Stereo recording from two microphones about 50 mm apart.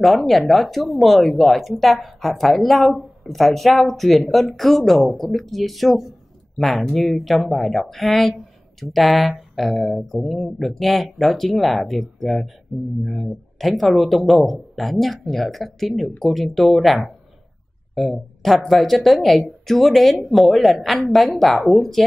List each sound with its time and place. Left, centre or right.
0.0 s speech: centre